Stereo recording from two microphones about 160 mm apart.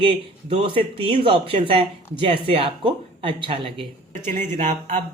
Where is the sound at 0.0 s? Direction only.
35° right (ahead or behind).